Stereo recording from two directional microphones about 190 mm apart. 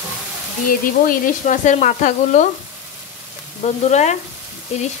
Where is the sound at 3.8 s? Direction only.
35° left (ahead or behind).